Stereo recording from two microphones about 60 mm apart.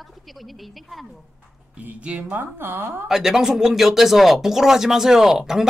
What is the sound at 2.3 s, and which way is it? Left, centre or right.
Speech, right.